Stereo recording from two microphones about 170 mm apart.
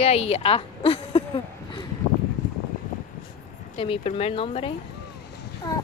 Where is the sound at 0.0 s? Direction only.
35° left (ahead or behind).